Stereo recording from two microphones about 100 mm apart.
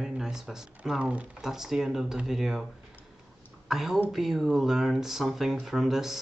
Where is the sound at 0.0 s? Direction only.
5° right (ahead or behind).